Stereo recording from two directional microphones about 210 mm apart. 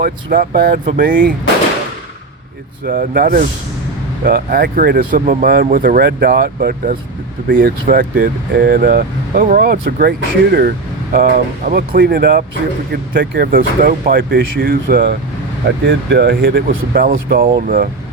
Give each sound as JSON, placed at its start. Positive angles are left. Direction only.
{"t": 0.0, "sound": "speech", "side_deg": -40}
{"t": 2.8, "sound": "speech", "side_deg": -45}
{"t": 15.9, "sound": "speech", "side_deg": -55}